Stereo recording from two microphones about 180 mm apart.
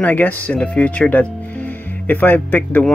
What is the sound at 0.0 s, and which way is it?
Speech, 10° left (ahead or behind).